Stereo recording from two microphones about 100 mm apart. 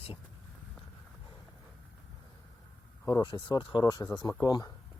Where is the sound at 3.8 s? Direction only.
40° left (ahead or behind).